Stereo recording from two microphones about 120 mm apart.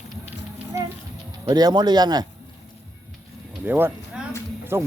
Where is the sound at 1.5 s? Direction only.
35° right (ahead or behind).